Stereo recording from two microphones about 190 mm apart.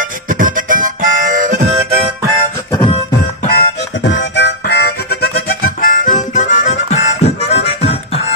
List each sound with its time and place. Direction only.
0.3 s harmonica: 45° right (ahead or behind)
3.4 s harmonica: 60° left (ahead or behind); by 8.2 s 30° left (ahead or behind)